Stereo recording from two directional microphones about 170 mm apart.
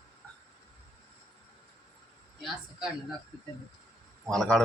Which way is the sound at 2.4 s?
5° right (ahead or behind).